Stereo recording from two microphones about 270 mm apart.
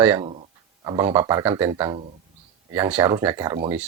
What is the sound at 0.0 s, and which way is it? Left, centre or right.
Speech, centre.